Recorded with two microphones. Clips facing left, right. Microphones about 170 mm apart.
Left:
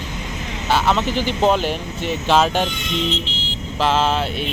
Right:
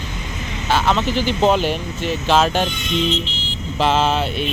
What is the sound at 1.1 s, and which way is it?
Speech, 50° left (ahead or behind).